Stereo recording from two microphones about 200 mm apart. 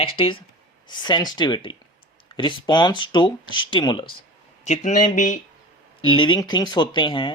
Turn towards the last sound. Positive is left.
turn(degrees=25)  # may be behind; listen again after turning